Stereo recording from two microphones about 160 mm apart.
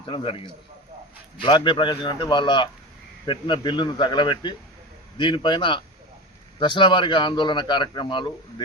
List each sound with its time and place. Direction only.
0.0 s a man's voice: 30° left (ahead or behind)